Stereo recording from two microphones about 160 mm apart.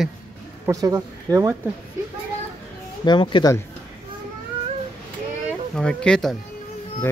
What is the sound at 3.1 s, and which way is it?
Speech, 30° left (ahead or behind).